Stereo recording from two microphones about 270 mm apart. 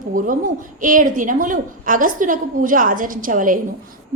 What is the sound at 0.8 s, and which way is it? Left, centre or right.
A woman's voice, right.